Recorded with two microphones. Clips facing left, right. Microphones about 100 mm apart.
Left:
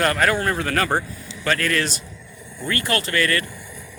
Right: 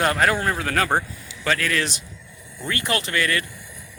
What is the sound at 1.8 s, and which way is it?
Speech, 15° right (ahead or behind).